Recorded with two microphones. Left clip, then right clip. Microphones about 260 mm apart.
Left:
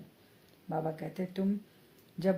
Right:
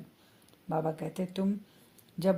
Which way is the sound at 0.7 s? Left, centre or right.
Right.